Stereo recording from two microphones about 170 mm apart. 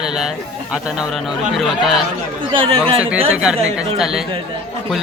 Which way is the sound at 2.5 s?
30° right (ahead or behind).